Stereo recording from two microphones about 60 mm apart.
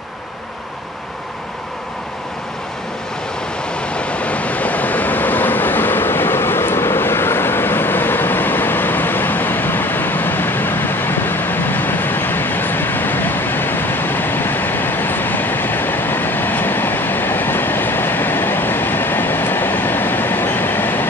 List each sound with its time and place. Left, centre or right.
3.9 s waves: left